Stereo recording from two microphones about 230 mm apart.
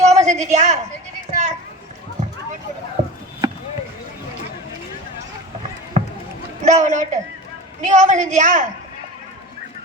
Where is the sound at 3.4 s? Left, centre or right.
Centre.